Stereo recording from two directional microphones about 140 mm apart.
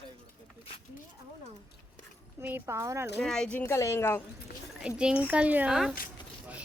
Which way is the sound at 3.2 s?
5° left (ahead or behind).